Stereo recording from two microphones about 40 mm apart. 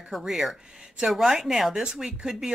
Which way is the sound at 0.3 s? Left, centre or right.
Centre.